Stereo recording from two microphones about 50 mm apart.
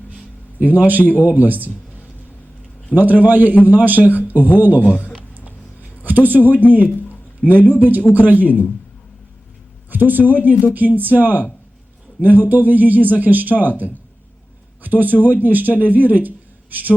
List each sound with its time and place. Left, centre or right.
0.6 s a man's voice: right
2.9 s a man's voice: right
4.9 s a man's voice: right
9.9 s a man's voice: right